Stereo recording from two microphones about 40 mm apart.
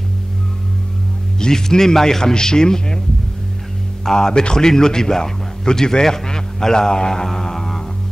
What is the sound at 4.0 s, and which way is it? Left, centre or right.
A man's voice, centre.